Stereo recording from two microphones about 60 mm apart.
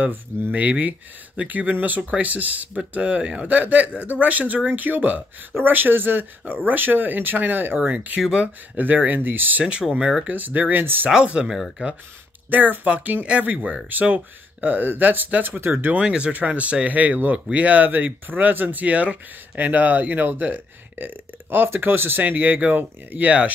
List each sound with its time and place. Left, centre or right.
0.0 s speech: right
8.2 s speech: centre
8.7 s speech: right
9.7 s speech: centre
10.2 s speech: right
12.4 s speech: right
16.0 s speech: centre